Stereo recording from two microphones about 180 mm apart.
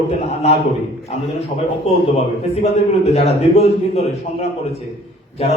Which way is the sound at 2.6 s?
35° left (ahead or behind).